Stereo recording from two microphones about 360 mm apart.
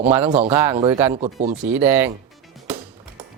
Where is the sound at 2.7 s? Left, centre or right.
Centre.